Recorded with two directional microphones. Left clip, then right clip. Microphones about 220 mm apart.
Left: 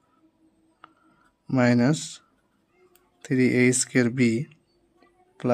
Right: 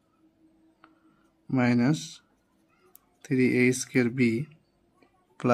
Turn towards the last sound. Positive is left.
turn(degrees=0)  # may be behind; listen again after turning